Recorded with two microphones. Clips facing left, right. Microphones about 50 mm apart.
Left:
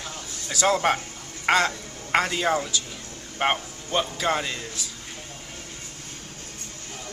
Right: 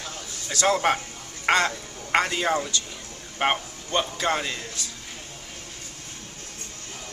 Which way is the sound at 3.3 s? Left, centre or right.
Centre.